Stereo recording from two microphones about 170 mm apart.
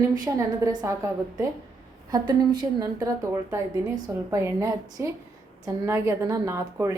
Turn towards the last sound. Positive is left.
turn(degrees=-15)  # may be behind; listen again after turning